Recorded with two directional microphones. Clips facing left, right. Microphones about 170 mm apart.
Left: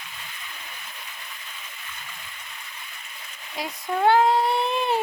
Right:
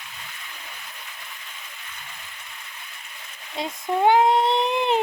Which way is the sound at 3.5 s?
20° right (ahead or behind).